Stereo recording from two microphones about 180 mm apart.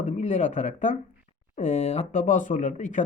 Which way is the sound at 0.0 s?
40° left (ahead or behind).